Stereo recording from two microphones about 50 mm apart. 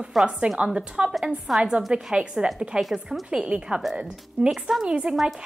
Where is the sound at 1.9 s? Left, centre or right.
Centre.